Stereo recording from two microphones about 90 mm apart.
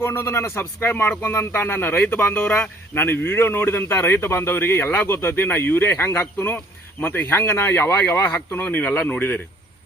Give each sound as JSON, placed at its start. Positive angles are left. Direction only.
{"t": 0.0, "sound": "speech", "side_deg": 25}